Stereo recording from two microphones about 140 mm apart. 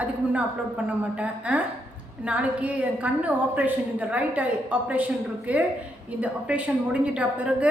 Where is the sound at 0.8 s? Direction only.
10° right (ahead or behind).